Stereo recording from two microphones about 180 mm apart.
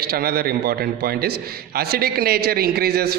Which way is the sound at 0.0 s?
60° right (ahead or behind).